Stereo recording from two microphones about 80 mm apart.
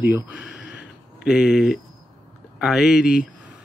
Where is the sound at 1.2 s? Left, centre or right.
Centre.